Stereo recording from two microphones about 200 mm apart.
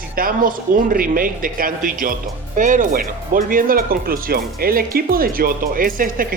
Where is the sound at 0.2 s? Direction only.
45° right (ahead or behind).